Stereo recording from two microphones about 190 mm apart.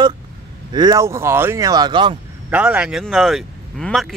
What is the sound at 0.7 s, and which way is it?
Speech, 20° right (ahead or behind).